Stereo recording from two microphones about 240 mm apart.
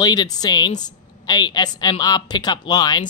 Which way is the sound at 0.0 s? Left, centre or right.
Centre.